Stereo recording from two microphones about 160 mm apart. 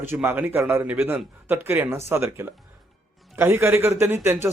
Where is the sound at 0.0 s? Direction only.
15° right (ahead or behind).